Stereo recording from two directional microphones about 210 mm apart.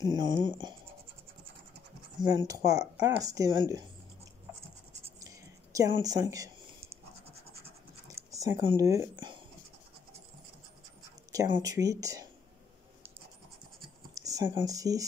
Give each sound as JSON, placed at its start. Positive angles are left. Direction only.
{"t": 0.0, "sound": "speech", "side_deg": -20}
{"t": 2.2, "sound": "speech", "side_deg": -15}
{"t": 5.2, "sound": "a sound", "side_deg": -15}
{"t": 8.1, "sound": "speech", "side_deg": -15}
{"t": 11.3, "sound": "speech", "side_deg": -20}
{"t": 14.1, "sound": "speech", "side_deg": -15}